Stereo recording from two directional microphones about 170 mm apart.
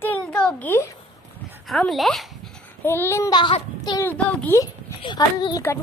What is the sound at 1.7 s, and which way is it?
Speech, centre (ahead or behind).